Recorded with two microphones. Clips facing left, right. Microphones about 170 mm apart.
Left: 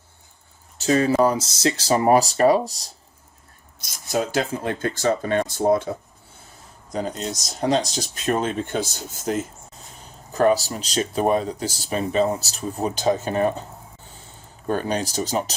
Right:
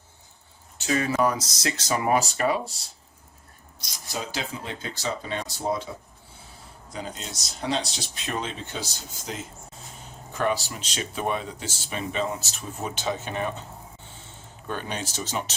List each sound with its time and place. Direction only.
0.8 s speech: 35° left (ahead or behind)
3.8 s speech: 50° left (ahead or behind)
6.9 s speech: 45° left (ahead or behind)
10.3 s speech: 40° left (ahead or behind)